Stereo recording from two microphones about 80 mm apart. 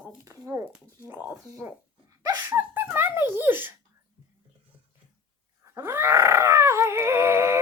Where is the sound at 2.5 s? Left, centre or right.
Right.